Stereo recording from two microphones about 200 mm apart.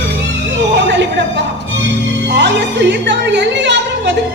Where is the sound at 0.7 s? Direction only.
60° right (ahead or behind).